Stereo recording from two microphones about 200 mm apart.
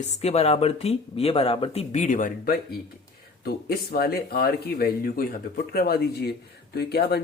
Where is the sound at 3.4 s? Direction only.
50° left (ahead or behind).